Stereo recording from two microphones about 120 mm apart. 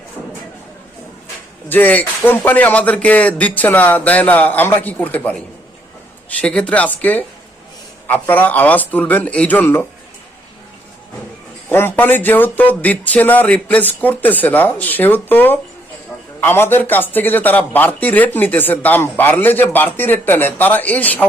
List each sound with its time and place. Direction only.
1.7 s speech: 15° left (ahead or behind)
6.4 s speech: 10° left (ahead or behind)
11.7 s speech: 20° left (ahead or behind)